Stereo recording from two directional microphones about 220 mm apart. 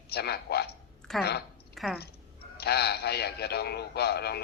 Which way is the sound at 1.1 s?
Centre (ahead or behind).